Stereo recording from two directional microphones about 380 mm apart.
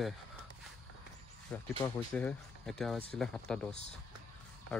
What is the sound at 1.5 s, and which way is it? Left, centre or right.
Speech, centre.